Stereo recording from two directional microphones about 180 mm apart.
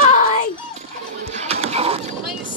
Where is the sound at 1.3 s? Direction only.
35° right (ahead or behind).